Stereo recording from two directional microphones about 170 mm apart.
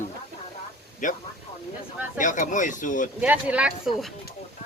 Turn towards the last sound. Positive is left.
turn(degrees=-5)  # may be behind; listen again after turning